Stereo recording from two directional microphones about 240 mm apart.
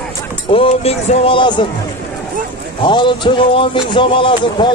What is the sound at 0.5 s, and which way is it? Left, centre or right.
Speech, left.